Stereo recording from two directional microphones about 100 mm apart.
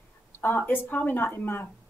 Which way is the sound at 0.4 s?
20° left (ahead or behind).